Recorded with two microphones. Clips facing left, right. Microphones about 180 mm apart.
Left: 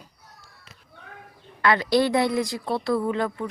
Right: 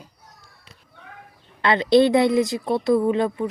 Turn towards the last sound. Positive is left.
turn(degrees=-20)  # may be behind; listen again after turning